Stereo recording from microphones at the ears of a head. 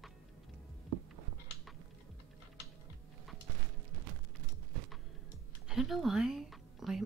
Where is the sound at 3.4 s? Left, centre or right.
Right.